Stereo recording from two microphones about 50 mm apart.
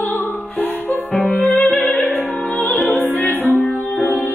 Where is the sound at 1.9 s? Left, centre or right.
Left.